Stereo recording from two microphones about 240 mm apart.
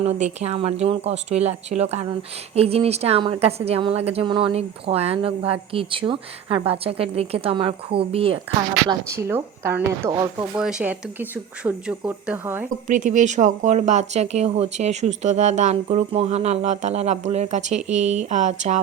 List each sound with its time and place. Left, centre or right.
0.0 s a woman's voice: right
8.9 s speech: centre
12.9 s a woman's voice: right
17.7 s speech: centre
18.1 s a woman's voice: right